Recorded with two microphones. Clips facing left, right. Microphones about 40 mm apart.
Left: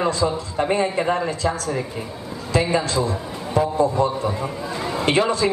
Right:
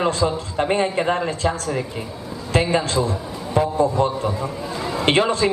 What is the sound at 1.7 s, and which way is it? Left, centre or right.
Speech, centre.